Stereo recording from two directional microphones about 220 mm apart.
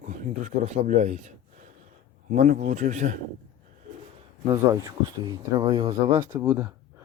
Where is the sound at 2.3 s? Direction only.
35° right (ahead or behind).